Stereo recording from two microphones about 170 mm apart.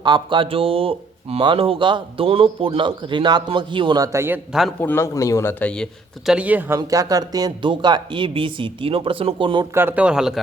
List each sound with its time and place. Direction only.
0.0 s speech: 30° right (ahead or behind)
4.8 s a man's voice: 15° left (ahead or behind)
6.3 s speech: 10° right (ahead or behind); by 9.6 s 30° right (ahead or behind)
9.7 s speech: 10° right (ahead or behind)